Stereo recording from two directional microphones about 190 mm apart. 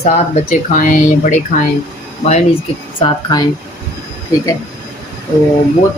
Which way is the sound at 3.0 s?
25° left (ahead or behind).